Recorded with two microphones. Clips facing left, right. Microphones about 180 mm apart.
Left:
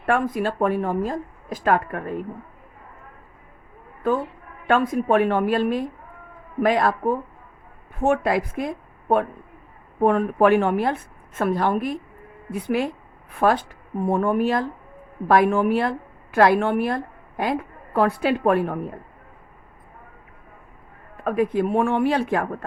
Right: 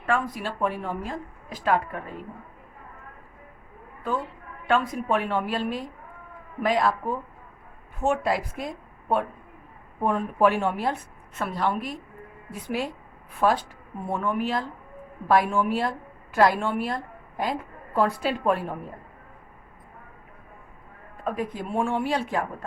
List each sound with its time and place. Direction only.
0.0 s speech: 55° left (ahead or behind)
4.6 s a woman's voice: 50° left (ahead or behind)
15.3 s a woman's voice: 55° left (ahead or behind)
21.2 s speech: 60° left (ahead or behind)